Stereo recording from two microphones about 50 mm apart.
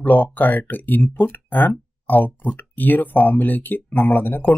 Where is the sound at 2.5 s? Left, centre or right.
Left.